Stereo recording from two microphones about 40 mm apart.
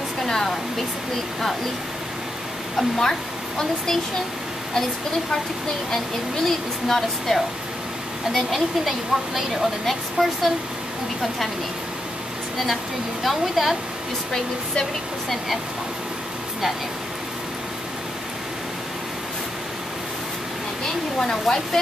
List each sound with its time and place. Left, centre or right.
0.2 s a sound: centre
3.0 s speech: centre
6.4 s a woman's voice: centre
13.2 s a woman's voice: centre
14.3 s speech: centre
21.2 s speech: centre